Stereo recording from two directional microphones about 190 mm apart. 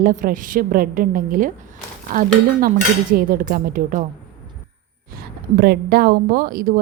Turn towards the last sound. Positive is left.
turn(degrees=-50)  # may be behind; listen again after turning